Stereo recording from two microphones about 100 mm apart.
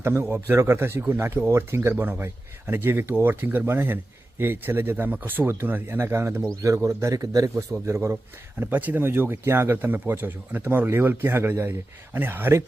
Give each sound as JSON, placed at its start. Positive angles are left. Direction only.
{"t": 0.0, "sound": "a man's voice", "side_deg": -20}